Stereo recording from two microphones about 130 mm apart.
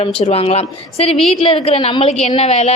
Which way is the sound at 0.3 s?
50° left (ahead or behind).